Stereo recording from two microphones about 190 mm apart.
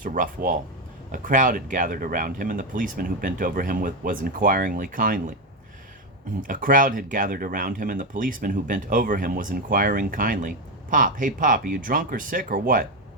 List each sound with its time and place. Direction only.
0.0 s speech: 45° right (ahead or behind)
6.5 s speech: 45° right (ahead or behind)